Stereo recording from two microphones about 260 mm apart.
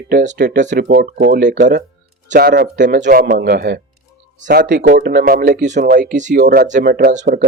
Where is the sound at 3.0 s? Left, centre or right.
Right.